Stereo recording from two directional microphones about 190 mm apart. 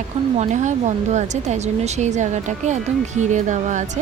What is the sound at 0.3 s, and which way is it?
Speech, 40° right (ahead or behind).